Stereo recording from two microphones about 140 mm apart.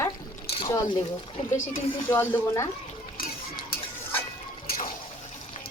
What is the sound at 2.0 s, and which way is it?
Speech, 15° left (ahead or behind).